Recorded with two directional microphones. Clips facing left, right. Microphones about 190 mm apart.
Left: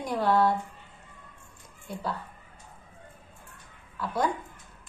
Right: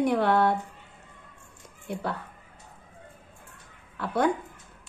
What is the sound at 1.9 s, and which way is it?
Speech, 60° right (ahead or behind).